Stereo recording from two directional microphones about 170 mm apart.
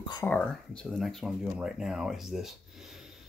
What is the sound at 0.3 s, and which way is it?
Speech, 5° left (ahead or behind).